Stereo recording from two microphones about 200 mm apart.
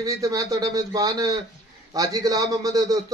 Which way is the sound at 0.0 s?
15° right (ahead or behind).